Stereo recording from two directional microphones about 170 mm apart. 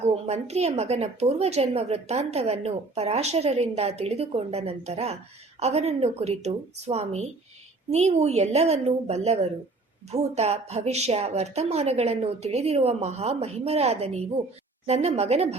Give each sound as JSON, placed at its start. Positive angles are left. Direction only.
{"t": 0.0, "sound": "a woman's voice", "side_deg": -40}